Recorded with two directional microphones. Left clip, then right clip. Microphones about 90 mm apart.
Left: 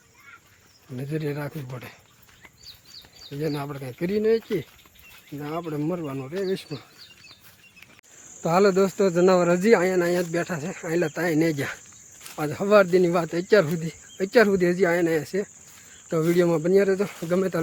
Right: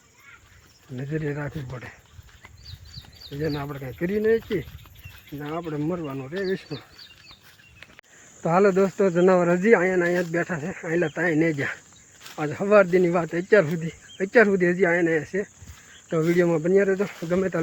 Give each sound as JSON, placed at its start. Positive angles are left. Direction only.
{"t": 0.9, "sound": "speech", "side_deg": 25}
{"t": 3.3, "sound": "speech", "side_deg": 25}
{"t": 5.5, "sound": "speech", "side_deg": 20}
{"t": 8.4, "sound": "speech", "side_deg": 25}
{"t": 9.5, "sound": "speech", "side_deg": 35}
{"t": 10.6, "sound": "speech", "side_deg": 35}
{"t": 14.2, "sound": "speech", "side_deg": 25}